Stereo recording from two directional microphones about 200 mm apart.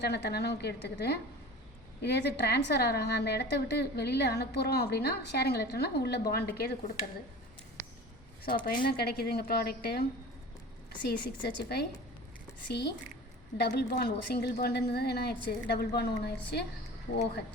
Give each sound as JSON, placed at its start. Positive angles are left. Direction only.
{"t": 0.0, "sound": "a woman's voice", "side_deg": 55}
{"t": 8.4, "sound": "a woman's voice", "side_deg": 45}
{"t": 11.4, "sound": "a woman's voice", "side_deg": 55}